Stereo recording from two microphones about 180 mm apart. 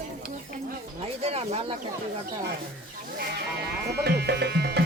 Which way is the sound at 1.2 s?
35° right (ahead or behind).